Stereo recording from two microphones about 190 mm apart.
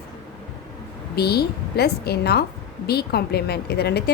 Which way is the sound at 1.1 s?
55° left (ahead or behind).